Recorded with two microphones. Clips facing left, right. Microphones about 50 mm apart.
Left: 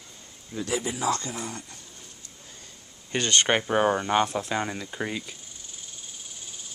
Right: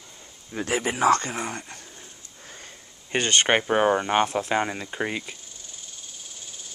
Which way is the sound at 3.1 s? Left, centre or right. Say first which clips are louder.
Right 2 dB; right.